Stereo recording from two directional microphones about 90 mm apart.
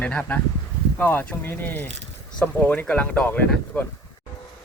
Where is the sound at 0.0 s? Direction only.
15° left (ahead or behind).